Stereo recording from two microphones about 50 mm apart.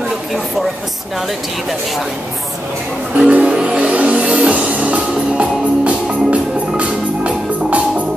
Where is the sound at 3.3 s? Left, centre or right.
Right.